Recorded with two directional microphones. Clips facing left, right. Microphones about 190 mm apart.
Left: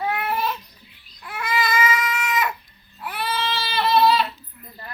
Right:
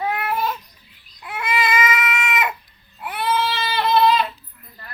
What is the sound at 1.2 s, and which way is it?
Baby cry, 20° right (ahead or behind).